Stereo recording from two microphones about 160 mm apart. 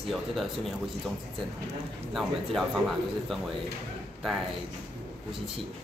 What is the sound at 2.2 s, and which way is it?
Speech, centre (ahead or behind).